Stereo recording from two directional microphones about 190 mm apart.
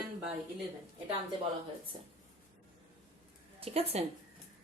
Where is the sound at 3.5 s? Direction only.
30° right (ahead or behind).